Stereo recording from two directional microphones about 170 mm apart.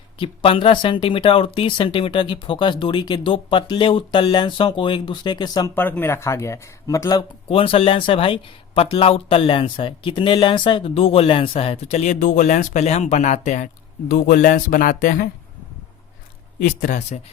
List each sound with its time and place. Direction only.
0.2 s speech: 30° left (ahead or behind)
5.7 s speech: 10° left (ahead or behind)
7.5 s speech: 35° left (ahead or behind)
14.1 s speech: 55° left (ahead or behind)
16.6 s speech: 50° left (ahead or behind)